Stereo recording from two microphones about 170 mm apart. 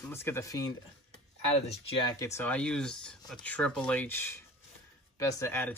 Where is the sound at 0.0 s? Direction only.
15° left (ahead or behind).